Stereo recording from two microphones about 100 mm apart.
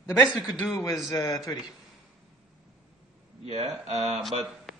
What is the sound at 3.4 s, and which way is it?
Speech, 90° right.